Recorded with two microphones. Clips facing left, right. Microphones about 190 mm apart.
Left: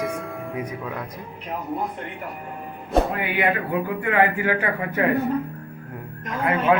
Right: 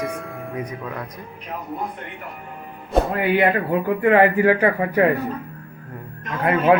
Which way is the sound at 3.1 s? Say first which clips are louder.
Right 5 dB; 40° right (ahead or behind).